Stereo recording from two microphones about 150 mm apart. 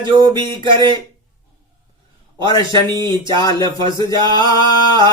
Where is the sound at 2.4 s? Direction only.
25° left (ahead or behind).